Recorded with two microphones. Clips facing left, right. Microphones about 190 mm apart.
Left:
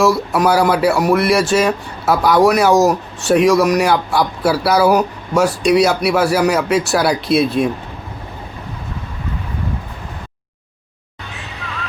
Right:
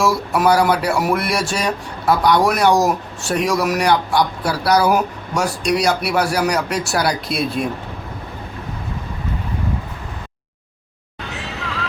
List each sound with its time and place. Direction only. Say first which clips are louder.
0.0 s speech: left 3 dB; centre (ahead or behind)